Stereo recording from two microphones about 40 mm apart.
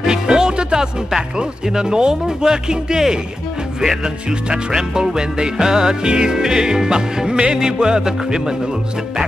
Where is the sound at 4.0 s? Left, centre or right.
Right.